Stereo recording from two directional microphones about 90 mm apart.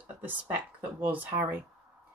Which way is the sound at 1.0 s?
20° right (ahead or behind).